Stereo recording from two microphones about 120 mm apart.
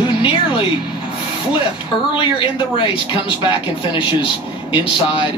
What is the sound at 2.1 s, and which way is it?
A man's voice, 45° left (ahead or behind).